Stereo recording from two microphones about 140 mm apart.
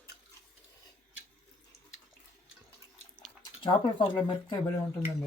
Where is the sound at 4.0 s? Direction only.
35° left (ahead or behind).